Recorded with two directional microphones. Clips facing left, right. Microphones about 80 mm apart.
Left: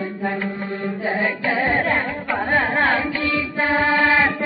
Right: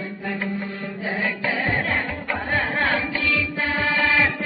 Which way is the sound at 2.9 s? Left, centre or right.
Left.